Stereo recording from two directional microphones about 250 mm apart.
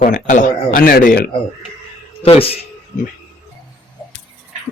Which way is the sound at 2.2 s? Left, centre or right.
Left.